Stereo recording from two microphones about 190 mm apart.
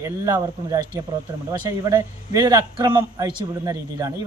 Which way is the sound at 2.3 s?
20° right (ahead or behind).